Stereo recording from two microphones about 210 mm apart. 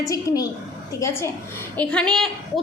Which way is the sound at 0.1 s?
15° left (ahead or behind).